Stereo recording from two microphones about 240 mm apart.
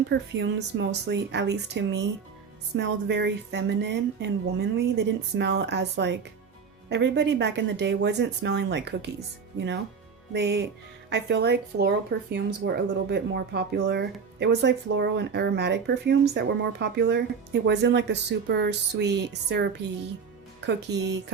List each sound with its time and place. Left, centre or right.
0.1 s speech: right